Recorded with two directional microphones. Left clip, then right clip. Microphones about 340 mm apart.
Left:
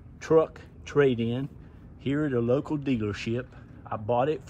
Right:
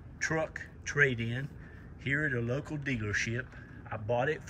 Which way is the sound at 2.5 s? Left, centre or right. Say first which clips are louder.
Left 9 dB; centre.